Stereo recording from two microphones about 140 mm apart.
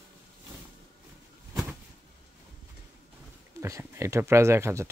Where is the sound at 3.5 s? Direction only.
20° right (ahead or behind).